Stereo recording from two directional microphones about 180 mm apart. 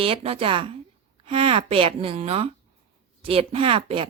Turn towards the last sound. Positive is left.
turn(degrees=-30)  # may be behind; listen again after turning